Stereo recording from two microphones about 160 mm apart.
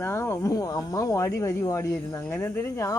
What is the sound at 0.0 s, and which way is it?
Speech, 15° left (ahead or behind).